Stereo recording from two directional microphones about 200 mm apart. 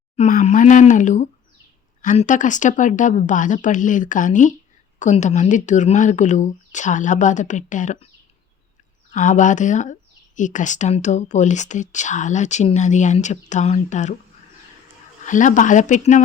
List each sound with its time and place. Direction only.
0.2 s speech: 35° left (ahead or behind)
9.1 s speech: 35° left (ahead or behind)
15.2 s speech: 40° left (ahead or behind)